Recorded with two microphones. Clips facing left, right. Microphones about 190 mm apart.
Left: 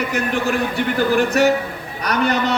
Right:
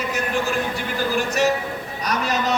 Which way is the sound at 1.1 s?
60° left (ahead or behind).